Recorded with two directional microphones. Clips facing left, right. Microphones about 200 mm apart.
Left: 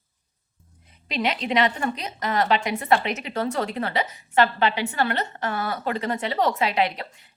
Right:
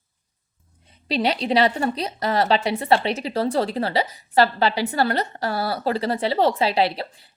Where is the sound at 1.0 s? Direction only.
35° right (ahead or behind).